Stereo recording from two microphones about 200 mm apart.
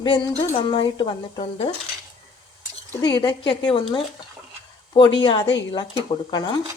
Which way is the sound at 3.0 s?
20° left (ahead or behind).